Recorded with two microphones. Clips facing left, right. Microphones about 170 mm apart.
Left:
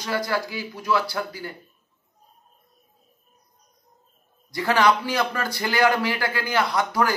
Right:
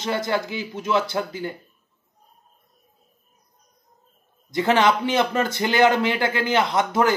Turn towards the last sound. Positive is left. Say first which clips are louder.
# right 3 dB
turn(degrees=-20)  # may be behind; listen again after turning